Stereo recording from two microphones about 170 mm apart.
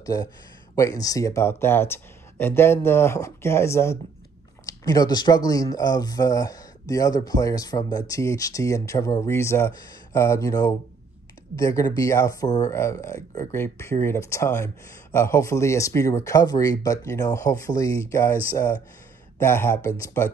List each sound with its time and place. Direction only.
0.0 s speech: 20° left (ahead or behind)
19.4 s speech: 15° left (ahead or behind)